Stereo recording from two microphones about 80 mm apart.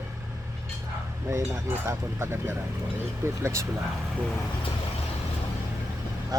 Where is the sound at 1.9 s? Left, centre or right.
Right.